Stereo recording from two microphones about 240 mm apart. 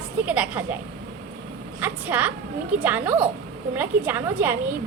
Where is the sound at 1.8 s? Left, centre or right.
Centre.